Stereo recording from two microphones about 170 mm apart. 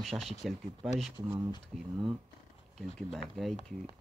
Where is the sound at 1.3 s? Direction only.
25° right (ahead or behind).